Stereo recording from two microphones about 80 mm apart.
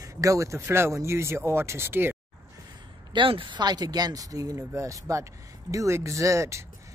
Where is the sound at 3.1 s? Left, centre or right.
Right.